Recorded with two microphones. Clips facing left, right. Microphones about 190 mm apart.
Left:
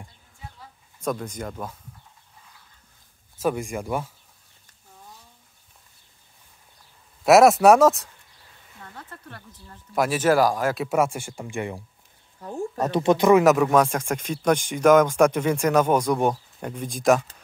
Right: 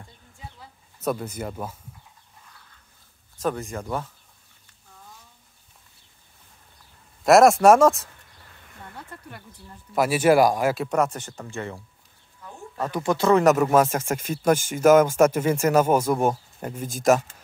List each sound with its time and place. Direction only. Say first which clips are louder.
0.6 s chicken: even; 5° right (ahead or behind)
3.3 s speech: left 2 dB; 10° left (ahead or behind)
7.2 s speech: even; 5° left (ahead or behind)
9.1 s speech: right 1 dB; 15° right (ahead or behind)
10.8 s speech: left 1 dB; 5° left (ahead or behind)
12.4 s a sound: left 8 dB; 40° left (ahead or behind)
12.8 s speech: left 4 dB; 20° left (ahead or behind)
13.3 s speech: even; centre (ahead or behind)